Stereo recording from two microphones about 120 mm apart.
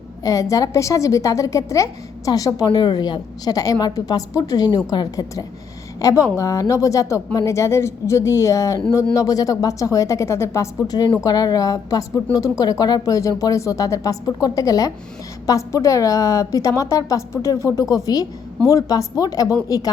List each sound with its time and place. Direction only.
0.2 s a woman's voice: 30° left (ahead or behind)